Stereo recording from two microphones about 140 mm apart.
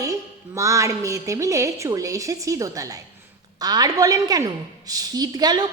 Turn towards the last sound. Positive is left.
turn(degrees=-30)  # may be behind; listen again after turning